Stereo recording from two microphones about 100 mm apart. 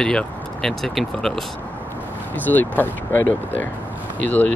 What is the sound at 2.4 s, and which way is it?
Speech, 20° left (ahead or behind).